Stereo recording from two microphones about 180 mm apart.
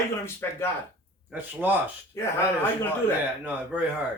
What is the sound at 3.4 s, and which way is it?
Speech, 10° right (ahead or behind).